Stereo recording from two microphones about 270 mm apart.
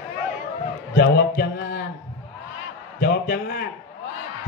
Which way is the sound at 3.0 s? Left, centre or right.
Left.